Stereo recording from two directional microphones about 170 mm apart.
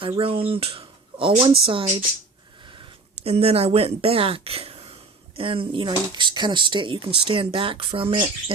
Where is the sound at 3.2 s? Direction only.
35° right (ahead or behind).